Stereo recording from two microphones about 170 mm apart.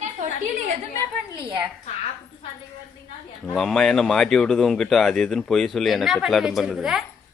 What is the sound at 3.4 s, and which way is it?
Speech, centre (ahead or behind).